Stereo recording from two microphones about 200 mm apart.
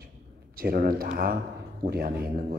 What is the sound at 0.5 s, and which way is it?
A man's voice, 45° right (ahead or behind).